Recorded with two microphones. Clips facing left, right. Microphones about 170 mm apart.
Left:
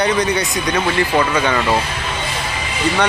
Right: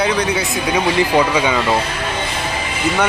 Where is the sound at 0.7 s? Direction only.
15° right (ahead or behind).